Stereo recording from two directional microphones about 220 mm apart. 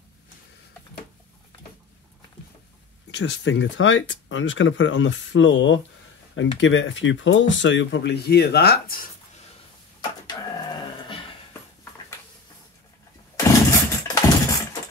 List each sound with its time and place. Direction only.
3.1 s speech: 55° left (ahead or behind)
10.2 s printer: 20° left (ahead or behind)
13.4 s a sound: 15° left (ahead or behind)